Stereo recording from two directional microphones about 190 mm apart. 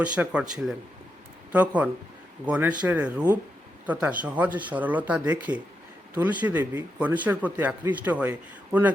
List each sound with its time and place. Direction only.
0.0 s speech: 5° right (ahead or behind)